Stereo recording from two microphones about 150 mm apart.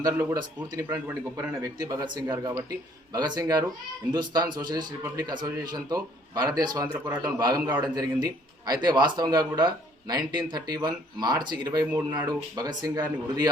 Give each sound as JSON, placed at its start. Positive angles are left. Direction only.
{"t": 0.0, "sound": "a man's voice", "side_deg": -20}
{"t": 6.9, "sound": "a man's voice", "side_deg": -15}
{"t": 7.2, "sound": "a man's voice", "side_deg": -25}